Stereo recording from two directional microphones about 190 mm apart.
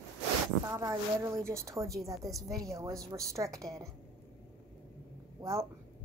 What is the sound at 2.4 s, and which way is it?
A woman's voice, 20° right (ahead or behind).